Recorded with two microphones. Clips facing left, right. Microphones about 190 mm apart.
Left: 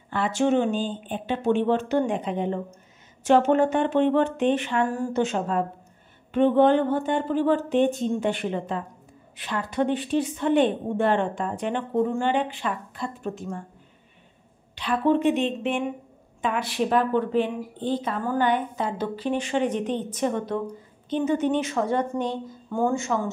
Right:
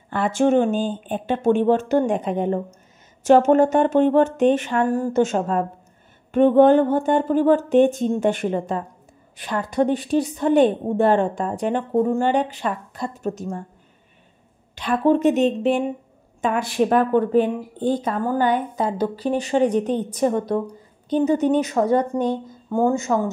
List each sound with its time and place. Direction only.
0.1 s a woman's voice: 50° right (ahead or behind)
14.8 s a woman's voice: 45° right (ahead or behind)